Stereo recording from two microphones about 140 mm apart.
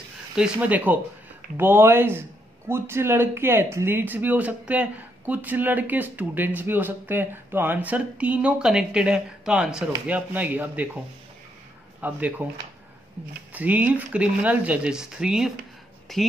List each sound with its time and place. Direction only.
0.4 s speech: 10° right (ahead or behind)
12.0 s speech: 10° right (ahead or behind)
13.5 s speech: 10° right (ahead or behind)